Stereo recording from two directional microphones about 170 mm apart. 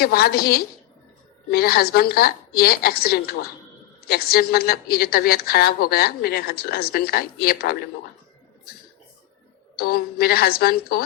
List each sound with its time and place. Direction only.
0.0 s a woman's voice: 65° left (ahead or behind)
9.7 s a woman's voice: 65° left (ahead or behind)